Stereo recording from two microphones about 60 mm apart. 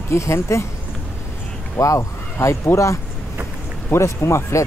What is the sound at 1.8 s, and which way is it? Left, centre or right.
Speech, left.